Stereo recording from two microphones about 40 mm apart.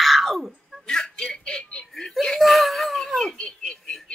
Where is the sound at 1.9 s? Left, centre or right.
Centre.